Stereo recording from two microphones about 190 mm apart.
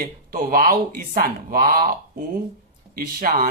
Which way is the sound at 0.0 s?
50° right (ahead or behind).